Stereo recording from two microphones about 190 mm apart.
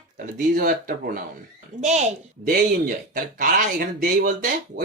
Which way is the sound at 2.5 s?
50° right (ahead or behind).